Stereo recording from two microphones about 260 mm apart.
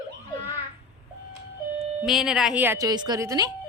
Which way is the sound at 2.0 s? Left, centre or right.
Centre.